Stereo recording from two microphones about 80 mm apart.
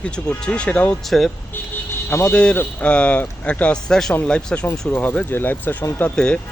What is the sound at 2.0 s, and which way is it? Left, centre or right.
Speech, left.